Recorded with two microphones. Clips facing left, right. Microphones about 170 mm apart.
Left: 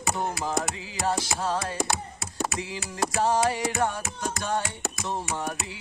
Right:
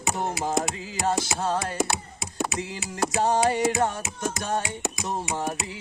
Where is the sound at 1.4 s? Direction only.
20° right (ahead or behind).